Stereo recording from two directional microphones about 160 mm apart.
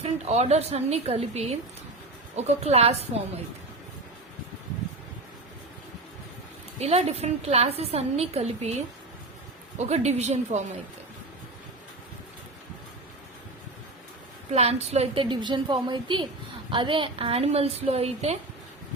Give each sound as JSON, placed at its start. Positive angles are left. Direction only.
{"t": 0.0, "sound": "a woman's voice", "side_deg": -40}
{"t": 6.7, "sound": "a woman's voice", "side_deg": -40}
{"t": 9.7, "sound": "a woman's voice", "side_deg": -45}
{"t": 14.5, "sound": "a woman's voice", "side_deg": -40}